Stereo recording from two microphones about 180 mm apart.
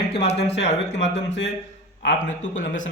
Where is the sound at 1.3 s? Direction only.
75° left (ahead or behind).